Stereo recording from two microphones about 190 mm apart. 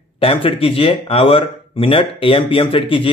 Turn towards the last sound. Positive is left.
turn(degrees=25)  # may be behind; listen again after turning